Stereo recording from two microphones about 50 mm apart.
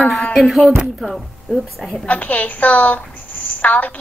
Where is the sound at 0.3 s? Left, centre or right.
Centre.